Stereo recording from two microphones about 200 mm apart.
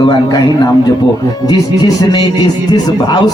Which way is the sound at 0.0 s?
20° left (ahead or behind).